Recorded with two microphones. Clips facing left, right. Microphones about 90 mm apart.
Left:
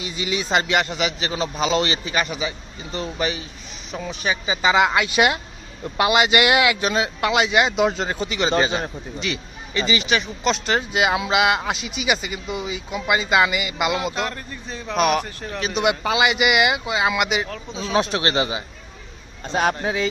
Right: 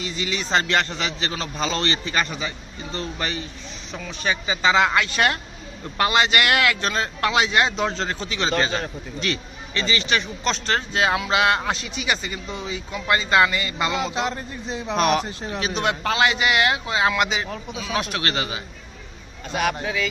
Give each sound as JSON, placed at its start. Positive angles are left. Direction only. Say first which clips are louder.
{"t": 0.0, "sound": "a man's voice", "louder": "left 2 dB", "side_deg": 15}
{"t": 14.0, "sound": "speech", "louder": "right 1 dB", "side_deg": -20}
{"t": 14.9, "sound": "speech", "louder": "left 1 dB", "side_deg": 5}
{"t": 15.2, "sound": "speech", "louder": "right 1 dB", "side_deg": -20}
{"t": 15.6, "sound": "a man's voice", "louder": "left 3 dB", "side_deg": 5}
{"t": 17.9, "sound": "speech", "louder": "left 5 dB", "side_deg": 20}
{"t": 19.5, "sound": "a man's voice", "louder": "left 3 dB", "side_deg": 30}